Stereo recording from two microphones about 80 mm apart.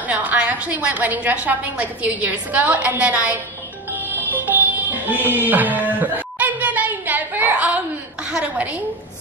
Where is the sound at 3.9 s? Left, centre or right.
Right.